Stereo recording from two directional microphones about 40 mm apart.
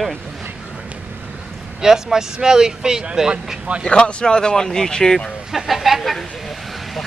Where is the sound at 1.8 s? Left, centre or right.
Centre.